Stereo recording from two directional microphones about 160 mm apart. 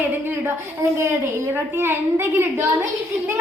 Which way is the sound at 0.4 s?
15° right (ahead or behind).